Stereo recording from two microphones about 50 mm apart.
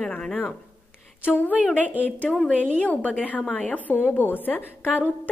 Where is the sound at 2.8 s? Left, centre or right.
Left.